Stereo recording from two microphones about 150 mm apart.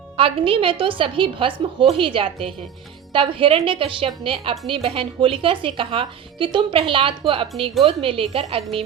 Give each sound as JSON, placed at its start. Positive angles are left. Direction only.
{"t": 0.2, "sound": "speech", "side_deg": -35}